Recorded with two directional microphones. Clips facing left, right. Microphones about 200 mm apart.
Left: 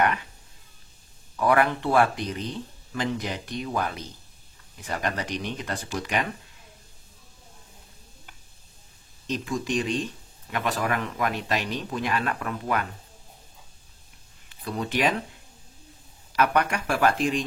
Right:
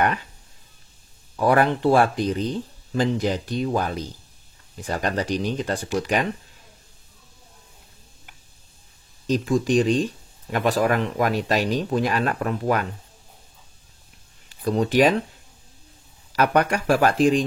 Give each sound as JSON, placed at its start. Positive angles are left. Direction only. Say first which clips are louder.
{"t": 1.3, "sound": "speech", "louder": "right 3 dB", "side_deg": -35}
{"t": 9.3, "sound": "speech", "louder": "right 8 dB", "side_deg": -35}
{"t": 14.6, "sound": "speech", "louder": "right 8 dB", "side_deg": -35}
{"t": 16.3, "sound": "speech", "louder": "right 4 dB", "side_deg": -35}